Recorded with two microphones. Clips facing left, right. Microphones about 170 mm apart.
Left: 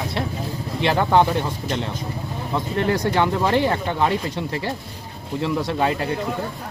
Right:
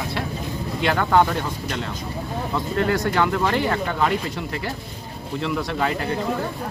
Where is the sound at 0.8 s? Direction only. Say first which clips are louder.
Left 1 dB; 20° left (ahead or behind).